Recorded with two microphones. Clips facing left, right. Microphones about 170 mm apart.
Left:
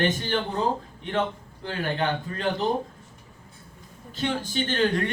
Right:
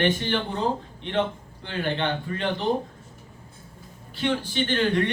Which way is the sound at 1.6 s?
40° left (ahead or behind).